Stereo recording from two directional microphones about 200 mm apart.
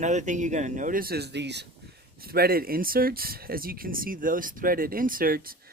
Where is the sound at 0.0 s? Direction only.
35° right (ahead or behind).